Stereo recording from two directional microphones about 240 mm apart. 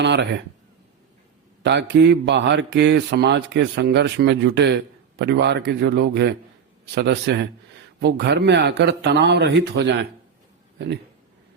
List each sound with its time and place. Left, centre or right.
0.0 s a man's voice: right
1.6 s a man's voice: right